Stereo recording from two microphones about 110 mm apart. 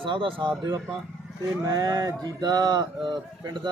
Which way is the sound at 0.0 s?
50° right (ahead or behind).